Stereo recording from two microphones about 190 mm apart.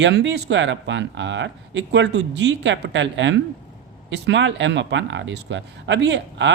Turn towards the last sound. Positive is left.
turn(degrees=-70)  # may be behind; listen again after turning